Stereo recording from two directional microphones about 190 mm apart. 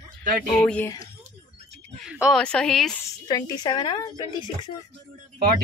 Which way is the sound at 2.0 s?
5° right (ahead or behind).